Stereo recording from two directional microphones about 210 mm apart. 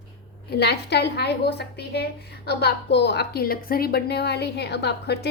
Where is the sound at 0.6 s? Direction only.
50° left (ahead or behind).